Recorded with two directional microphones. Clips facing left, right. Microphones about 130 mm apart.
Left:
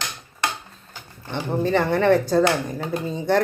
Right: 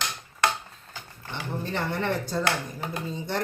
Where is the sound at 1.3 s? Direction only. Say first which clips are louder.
Left 10 dB; 90° left.